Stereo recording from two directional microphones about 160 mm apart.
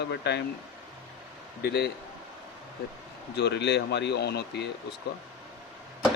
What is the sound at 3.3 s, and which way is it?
Speech, 90° left.